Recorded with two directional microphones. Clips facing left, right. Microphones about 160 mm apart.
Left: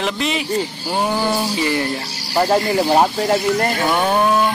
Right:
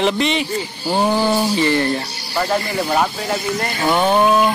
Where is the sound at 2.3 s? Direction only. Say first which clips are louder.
Left 4 dB; 35° left (ahead or behind).